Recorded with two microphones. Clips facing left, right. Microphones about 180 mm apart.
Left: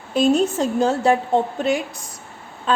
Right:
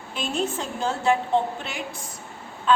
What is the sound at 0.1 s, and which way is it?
Speech, 40° left (ahead or behind).